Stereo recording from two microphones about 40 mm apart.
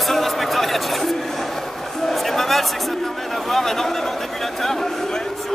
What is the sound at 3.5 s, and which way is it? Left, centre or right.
Speech, centre.